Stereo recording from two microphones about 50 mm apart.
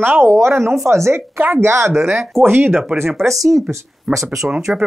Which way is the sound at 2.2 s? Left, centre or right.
Right.